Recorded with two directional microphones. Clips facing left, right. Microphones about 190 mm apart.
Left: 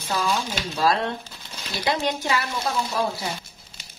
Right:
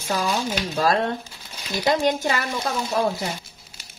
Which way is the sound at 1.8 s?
45° right (ahead or behind).